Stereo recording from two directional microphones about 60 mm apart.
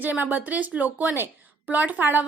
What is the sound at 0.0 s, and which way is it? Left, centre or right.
A woman's voice, right.